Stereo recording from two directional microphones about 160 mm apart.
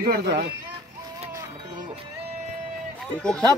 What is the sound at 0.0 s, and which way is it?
Speech, 70° right (ahead or behind).